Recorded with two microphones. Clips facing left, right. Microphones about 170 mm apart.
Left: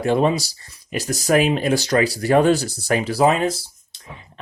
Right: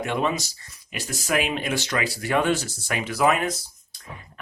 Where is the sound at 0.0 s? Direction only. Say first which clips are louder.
Left 7 dB; 35° left (ahead or behind).